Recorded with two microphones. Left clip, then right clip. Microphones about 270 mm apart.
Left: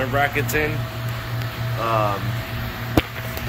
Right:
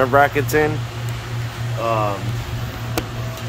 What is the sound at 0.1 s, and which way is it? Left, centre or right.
Speech, centre.